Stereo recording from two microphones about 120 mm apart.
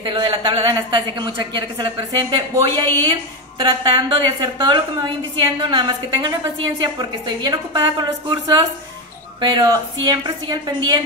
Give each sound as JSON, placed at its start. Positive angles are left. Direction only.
{"t": 0.0, "sound": "a woman's voice", "side_deg": -40}